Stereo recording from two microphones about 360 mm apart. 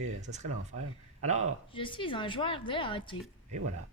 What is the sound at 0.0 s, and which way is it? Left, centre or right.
Speech, centre.